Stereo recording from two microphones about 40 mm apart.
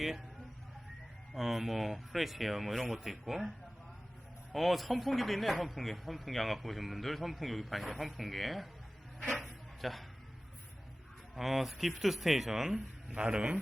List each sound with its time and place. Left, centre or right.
1.3 s speech: centre
4.5 s speech: centre
9.4 s a sound: centre
11.3 s speech: centre
13.2 s a man's voice: right